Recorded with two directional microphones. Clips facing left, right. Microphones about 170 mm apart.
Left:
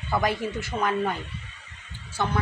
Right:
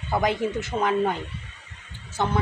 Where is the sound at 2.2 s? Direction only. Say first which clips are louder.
Right 2 dB; 20° right (ahead or behind).